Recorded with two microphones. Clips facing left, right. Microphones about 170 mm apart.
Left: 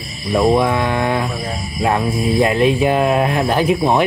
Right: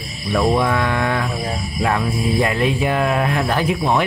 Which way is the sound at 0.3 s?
20° left (ahead or behind).